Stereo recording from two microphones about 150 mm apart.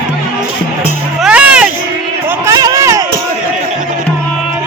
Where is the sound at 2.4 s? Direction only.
25° right (ahead or behind).